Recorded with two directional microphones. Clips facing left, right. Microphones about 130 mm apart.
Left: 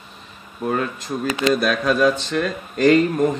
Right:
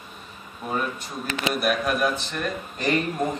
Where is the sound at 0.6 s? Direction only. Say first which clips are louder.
Left 5 dB; 80° left.